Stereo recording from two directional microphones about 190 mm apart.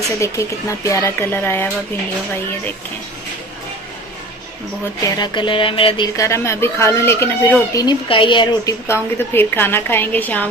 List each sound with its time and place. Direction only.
0.2 s speech: 15° left (ahead or behind)
5.0 s speech: 20° left (ahead or behind)
6.1 s speech: 15° left (ahead or behind)